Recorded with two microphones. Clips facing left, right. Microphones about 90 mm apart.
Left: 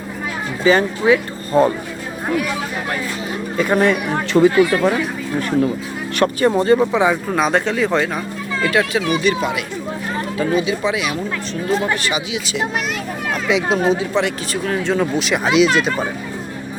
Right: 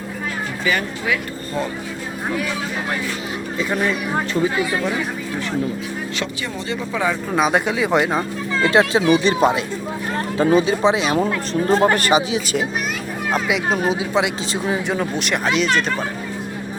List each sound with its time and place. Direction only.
0.6 s speech: 30° left (ahead or behind)
3.6 s speech: 65° left (ahead or behind)
6.1 s speech: 50° left (ahead or behind)
6.9 s speech: 20° left (ahead or behind)
7.3 s speech: 5° right (ahead or behind)
8.6 s speech: 30° right (ahead or behind)
11.6 s speech: 40° right (ahead or behind)
13.5 s speech: 5° right (ahead or behind)